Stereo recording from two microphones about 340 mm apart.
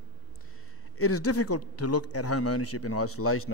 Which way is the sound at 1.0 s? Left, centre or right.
Left.